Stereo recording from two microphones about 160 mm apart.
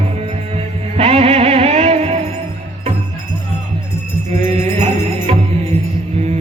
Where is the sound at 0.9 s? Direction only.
40° right (ahead or behind).